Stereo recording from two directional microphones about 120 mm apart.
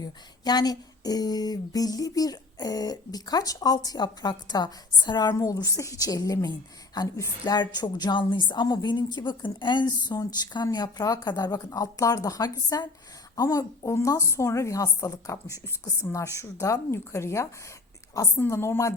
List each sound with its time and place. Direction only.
0.0 s a woman's voice: 35° left (ahead or behind)